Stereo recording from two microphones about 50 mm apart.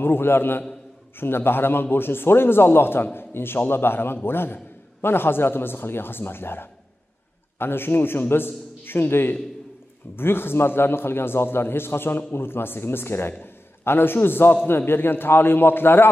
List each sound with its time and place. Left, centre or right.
0.0 s a man's voice: left